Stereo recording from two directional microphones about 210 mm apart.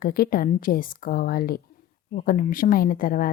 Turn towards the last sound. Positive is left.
turn(degrees=40)  # may be behind; listen again after turning